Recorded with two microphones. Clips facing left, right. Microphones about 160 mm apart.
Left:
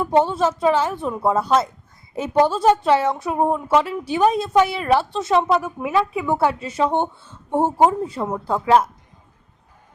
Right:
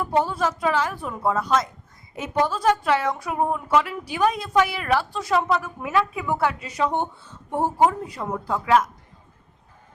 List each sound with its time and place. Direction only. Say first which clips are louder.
0.0 s a woman's voice: left 5 dB; 25° left (ahead or behind)